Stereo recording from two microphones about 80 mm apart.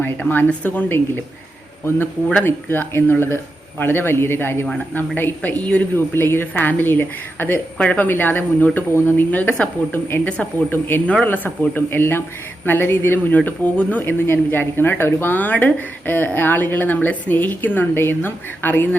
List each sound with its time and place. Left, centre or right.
0.2 s speech: left
2.4 s speech: left
6.0 s speech: left